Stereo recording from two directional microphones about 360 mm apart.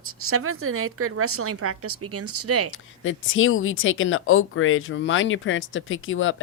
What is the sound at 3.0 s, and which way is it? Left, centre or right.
Speech, left.